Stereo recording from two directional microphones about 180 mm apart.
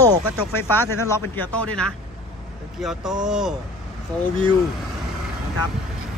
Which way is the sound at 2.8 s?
Centre (ahead or behind).